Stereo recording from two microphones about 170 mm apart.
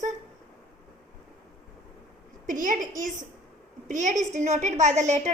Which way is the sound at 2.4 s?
50° right (ahead or behind).